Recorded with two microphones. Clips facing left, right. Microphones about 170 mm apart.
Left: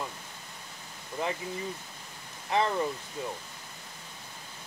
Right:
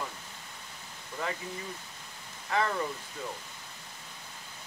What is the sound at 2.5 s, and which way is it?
Speech, 20° left (ahead or behind).